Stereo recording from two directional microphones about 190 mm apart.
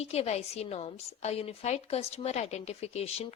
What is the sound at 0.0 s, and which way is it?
A woman's voice, 35° left (ahead or behind).